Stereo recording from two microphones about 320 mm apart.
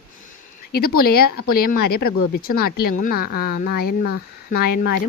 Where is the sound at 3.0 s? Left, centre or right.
Left.